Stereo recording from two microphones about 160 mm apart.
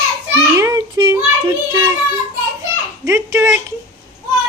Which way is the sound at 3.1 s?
20° right (ahead or behind).